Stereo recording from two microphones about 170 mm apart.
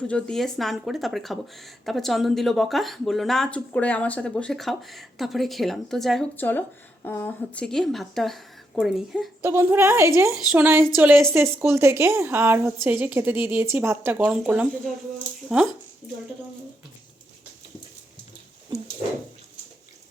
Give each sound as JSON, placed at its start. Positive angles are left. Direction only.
{"t": 0.1, "sound": "speech", "side_deg": 5}
{"t": 9.4, "sound": "speech", "side_deg": -15}
{"t": 11.1, "sound": "speech", "side_deg": 0}
{"t": 11.3, "sound": "speech", "side_deg": -15}